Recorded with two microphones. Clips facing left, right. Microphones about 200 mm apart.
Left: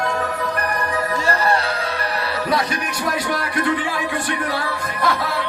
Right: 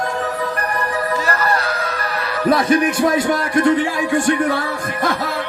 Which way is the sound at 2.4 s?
50° right (ahead or behind).